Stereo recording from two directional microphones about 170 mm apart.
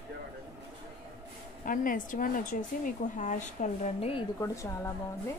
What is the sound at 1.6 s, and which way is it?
Speech, 50° left (ahead or behind).